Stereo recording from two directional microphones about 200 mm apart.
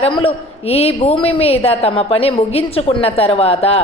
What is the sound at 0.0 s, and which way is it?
A woman's voice, 30° left (ahead or behind).